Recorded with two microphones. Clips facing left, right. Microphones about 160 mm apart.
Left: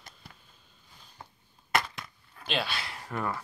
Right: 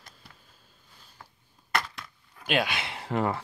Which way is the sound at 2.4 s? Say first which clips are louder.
Right 5 dB; 10° right (ahead or behind).